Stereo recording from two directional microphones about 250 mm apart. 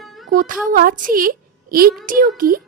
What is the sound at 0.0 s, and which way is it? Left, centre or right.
Music, centre.